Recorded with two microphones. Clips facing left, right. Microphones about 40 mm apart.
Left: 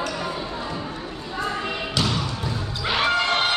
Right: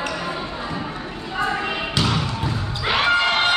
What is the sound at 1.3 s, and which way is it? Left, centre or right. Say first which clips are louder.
Basketball bounce: right 4 dB; right.